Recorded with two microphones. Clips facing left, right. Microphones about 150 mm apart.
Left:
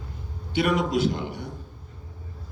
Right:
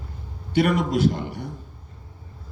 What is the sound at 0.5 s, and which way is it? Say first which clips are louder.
Speech: right 2 dB; 50° right (ahead or behind).